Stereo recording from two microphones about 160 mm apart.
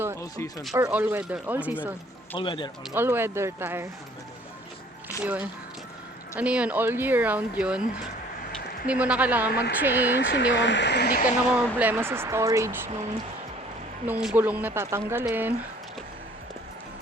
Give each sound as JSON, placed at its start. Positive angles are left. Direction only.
{"t": 0.2, "sound": "speech", "side_deg": 20}
{"t": 0.8, "sound": "speech", "side_deg": -10}
{"t": 2.3, "sound": "speech", "side_deg": 30}
{"t": 2.9, "sound": "speech", "side_deg": -15}
{"t": 5.2, "sound": "speech", "side_deg": -10}
{"t": 10.2, "sound": "speech", "side_deg": 90}
{"t": 11.4, "sound": "speech", "side_deg": -10}
{"t": 14.1, "sound": "speech", "side_deg": -10}